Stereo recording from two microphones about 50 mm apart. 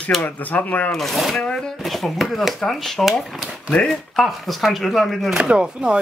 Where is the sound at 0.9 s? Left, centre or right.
Centre.